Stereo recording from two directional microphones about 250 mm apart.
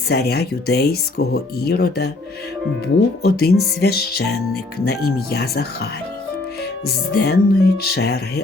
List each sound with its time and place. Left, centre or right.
0.1 s speech: left
7.2 s speech: left